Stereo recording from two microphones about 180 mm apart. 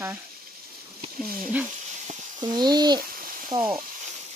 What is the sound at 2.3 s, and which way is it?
Speech, 25° right (ahead or behind).